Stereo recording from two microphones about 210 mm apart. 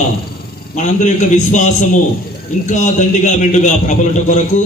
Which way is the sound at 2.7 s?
35° left (ahead or behind).